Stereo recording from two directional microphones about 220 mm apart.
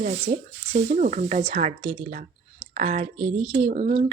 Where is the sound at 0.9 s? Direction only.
30° right (ahead or behind).